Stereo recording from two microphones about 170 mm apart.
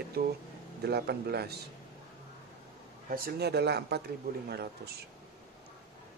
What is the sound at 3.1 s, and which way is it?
Speech, 65° right (ahead or behind).